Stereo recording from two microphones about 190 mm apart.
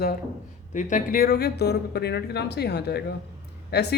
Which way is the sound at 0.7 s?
40° left (ahead or behind).